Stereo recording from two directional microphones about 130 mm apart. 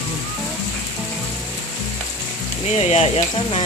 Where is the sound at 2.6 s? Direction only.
55° left (ahead or behind).